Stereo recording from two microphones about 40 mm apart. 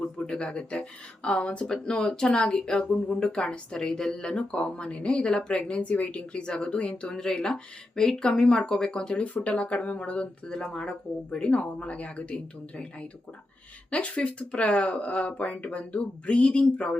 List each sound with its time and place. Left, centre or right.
0.2 s speech: left
4.4 s speech: left
7.2 s speech: centre
8.9 s speech: left
9.2 s speech: left
10.5 s speech: centre